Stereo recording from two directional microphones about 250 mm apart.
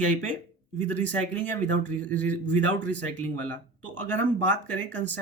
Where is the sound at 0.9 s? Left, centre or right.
Centre.